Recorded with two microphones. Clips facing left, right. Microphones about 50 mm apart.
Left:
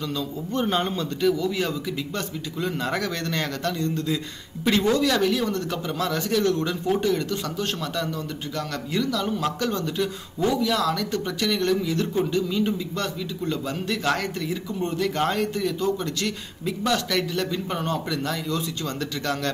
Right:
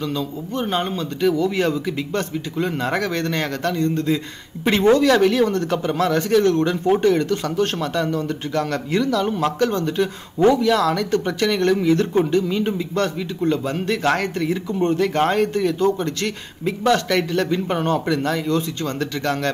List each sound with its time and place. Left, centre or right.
0.0 s speech: right